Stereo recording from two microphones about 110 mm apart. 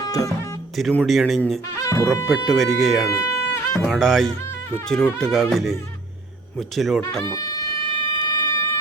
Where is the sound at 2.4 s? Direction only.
Centre (ahead or behind).